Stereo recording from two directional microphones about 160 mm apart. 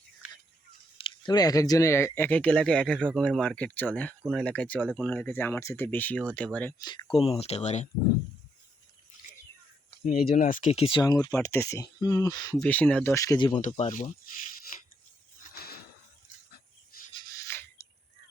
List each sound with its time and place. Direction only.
0.9 s speech: 30° left (ahead or behind); by 6.7 s 10° left (ahead or behind)
6.7 s speech: 25° left (ahead or behind); by 7.9 s 45° left (ahead or behind)
10.3 s speech: 60° left (ahead or behind); by 11.0 s 40° left (ahead or behind)
11.0 s speech: 25° left (ahead or behind)
12.5 s speech: 10° left (ahead or behind)
13.6 s speech: 45° left (ahead or behind)
17.4 s a sound: 15° left (ahead or behind)